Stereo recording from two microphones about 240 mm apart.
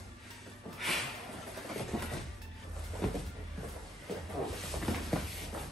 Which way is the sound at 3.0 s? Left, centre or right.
Centre.